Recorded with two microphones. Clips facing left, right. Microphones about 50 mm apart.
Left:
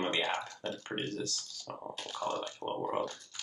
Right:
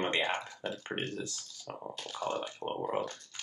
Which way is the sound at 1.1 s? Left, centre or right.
Right.